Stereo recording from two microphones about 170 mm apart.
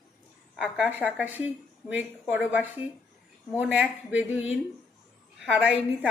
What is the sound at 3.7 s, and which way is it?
A woman's voice, 10° right (ahead or behind).